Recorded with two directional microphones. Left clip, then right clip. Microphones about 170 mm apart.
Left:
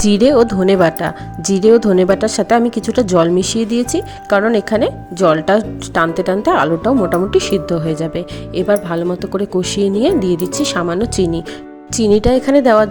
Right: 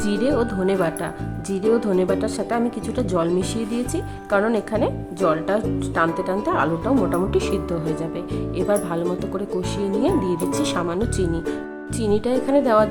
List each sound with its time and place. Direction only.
0.0 s speech: 35° left (ahead or behind)
11.9 s speech: 40° left (ahead or behind)